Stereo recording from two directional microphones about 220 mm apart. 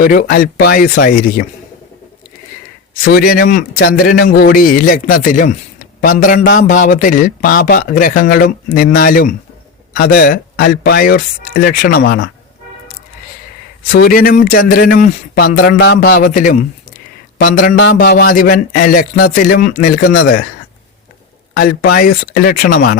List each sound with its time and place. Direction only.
0.0 s speech: 40° left (ahead or behind)
3.0 s speech: 40° left (ahead or behind)
13.8 s speech: 40° left (ahead or behind)
17.9 s speech: 50° left (ahead or behind)
21.5 s speech: 40° left (ahead or behind)